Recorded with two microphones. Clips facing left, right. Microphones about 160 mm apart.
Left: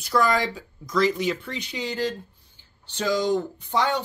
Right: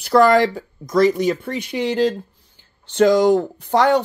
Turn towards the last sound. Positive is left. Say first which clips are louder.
# right 8 dB
turn(degrees=-80)